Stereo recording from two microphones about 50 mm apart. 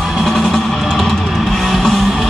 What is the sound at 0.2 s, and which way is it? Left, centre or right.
Music, centre.